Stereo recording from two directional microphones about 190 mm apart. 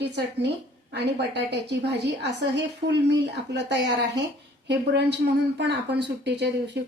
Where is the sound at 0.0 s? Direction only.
60° right (ahead or behind).